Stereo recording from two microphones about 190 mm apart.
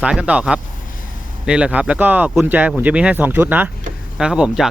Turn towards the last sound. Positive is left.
turn(degrees=-5)  # may be behind; listen again after turning